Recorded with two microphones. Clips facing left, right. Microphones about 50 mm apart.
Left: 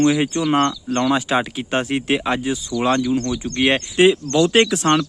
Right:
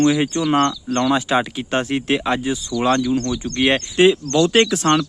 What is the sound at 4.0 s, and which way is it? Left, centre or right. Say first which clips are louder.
Speech: even; left.